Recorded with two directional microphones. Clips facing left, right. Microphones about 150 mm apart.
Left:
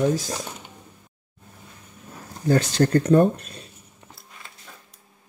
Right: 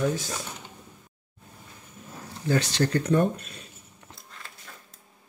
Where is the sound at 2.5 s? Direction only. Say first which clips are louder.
Left 5 dB; 45° left (ahead or behind).